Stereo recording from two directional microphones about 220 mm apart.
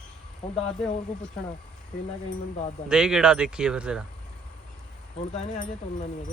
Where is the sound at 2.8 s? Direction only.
5° right (ahead or behind).